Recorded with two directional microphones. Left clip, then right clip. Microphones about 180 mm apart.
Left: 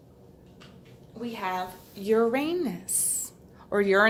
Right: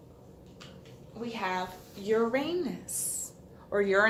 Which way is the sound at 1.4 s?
35° left (ahead or behind).